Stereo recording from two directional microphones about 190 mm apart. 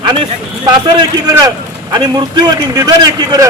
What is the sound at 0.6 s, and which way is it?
Speech, 20° right (ahead or behind).